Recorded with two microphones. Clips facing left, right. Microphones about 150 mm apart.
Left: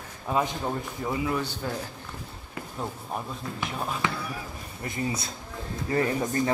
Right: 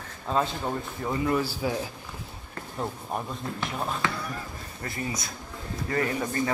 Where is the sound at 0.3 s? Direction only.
15° left (ahead or behind).